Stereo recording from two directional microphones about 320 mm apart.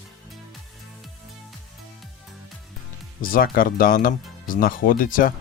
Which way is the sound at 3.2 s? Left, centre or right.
Left.